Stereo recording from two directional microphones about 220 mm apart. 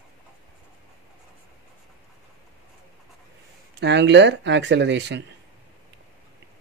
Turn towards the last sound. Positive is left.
turn(degrees=-50)  # may be behind; listen again after turning